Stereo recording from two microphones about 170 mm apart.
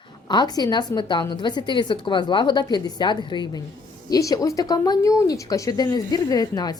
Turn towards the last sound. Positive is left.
turn(degrees=25)  # may be behind; listen again after turning